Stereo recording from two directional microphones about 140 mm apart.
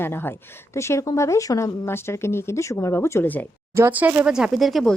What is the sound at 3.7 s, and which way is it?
Speech, 15° right (ahead or behind).